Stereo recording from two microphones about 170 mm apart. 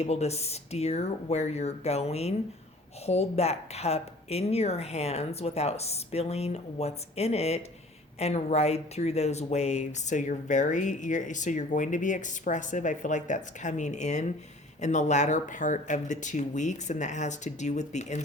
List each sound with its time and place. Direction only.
0.0 s speech: 40° left (ahead or behind)